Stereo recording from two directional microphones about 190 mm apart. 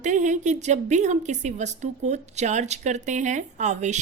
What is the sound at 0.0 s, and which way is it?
A woman's voice, 40° right (ahead or behind).